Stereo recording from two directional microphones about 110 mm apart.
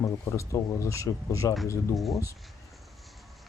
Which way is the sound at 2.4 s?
Centre (ahead or behind).